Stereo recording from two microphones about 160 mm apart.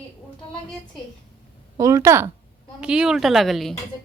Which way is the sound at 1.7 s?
20° right (ahead or behind).